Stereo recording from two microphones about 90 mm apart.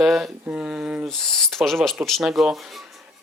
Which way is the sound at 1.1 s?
5° left (ahead or behind).